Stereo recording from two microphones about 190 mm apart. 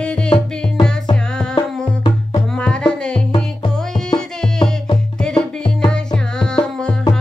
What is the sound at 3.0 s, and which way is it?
Music, 5° left (ahead or behind).